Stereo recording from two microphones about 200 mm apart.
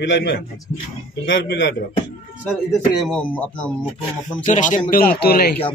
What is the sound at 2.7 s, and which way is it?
Speech, 5° left (ahead or behind).